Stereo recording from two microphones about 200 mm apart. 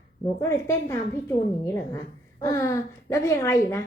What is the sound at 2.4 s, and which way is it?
A woman's voice, 15° left (ahead or behind).